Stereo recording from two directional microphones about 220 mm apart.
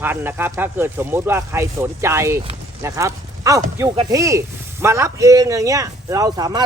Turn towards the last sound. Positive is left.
turn(degrees=-20)  # may be behind; listen again after turning